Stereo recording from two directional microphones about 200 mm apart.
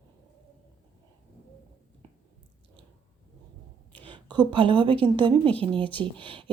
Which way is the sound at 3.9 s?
25° right (ahead or behind).